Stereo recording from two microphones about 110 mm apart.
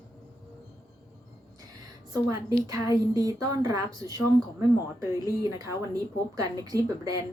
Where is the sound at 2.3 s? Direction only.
30° right (ahead or behind).